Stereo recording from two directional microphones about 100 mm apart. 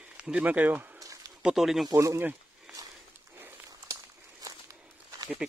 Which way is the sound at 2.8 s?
40° right (ahead or behind).